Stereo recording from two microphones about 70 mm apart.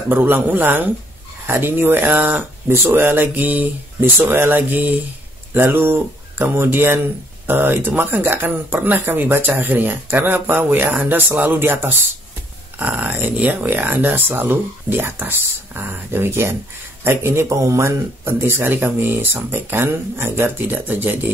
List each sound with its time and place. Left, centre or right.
0.1 s speech: right